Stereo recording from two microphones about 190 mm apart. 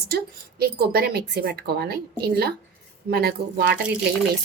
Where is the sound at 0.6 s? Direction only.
55° right (ahead or behind).